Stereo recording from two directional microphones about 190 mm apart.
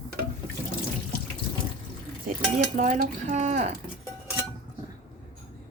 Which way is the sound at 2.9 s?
40° right (ahead or behind).